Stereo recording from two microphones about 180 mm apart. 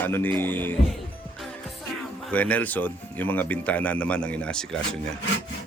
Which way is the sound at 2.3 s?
10° left (ahead or behind).